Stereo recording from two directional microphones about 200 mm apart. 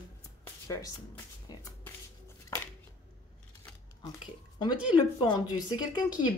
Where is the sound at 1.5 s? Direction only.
20° left (ahead or behind).